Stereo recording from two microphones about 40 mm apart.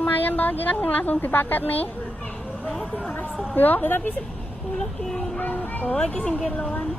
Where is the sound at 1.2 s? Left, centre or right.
Left.